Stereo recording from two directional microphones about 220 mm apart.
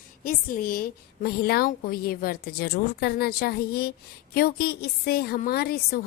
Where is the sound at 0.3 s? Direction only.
40° left (ahead or behind).